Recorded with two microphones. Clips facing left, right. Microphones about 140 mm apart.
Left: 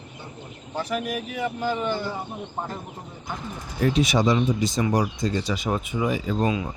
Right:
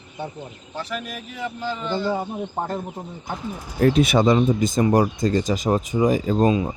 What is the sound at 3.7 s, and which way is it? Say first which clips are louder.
Speech: right 4 dB; 50° right (ahead or behind).